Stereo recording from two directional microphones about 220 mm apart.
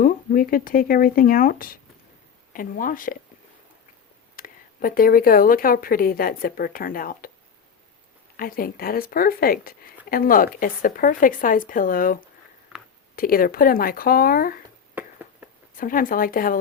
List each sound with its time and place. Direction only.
0.0 s speech: 40° left (ahead or behind)
4.4 s speech: 40° left (ahead or behind)
8.4 s speech: 40° left (ahead or behind)
14.9 s a sound: 10° right (ahead or behind)
15.8 s speech: 40° left (ahead or behind)